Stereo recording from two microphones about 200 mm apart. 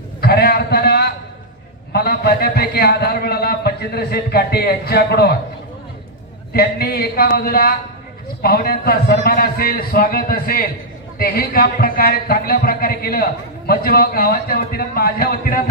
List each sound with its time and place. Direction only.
0.2 s a sound: 55° left (ahead or behind)
1.9 s speech: 50° left (ahead or behind)
6.5 s speech: 50° left (ahead or behind)